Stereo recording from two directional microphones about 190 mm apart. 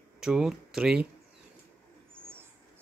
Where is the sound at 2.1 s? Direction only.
10° right (ahead or behind).